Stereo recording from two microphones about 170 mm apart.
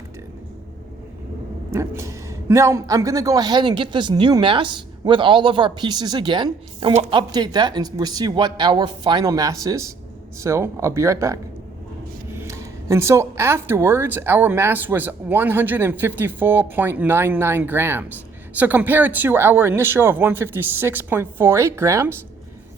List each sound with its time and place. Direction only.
1.7 s speech: 15° right (ahead or behind)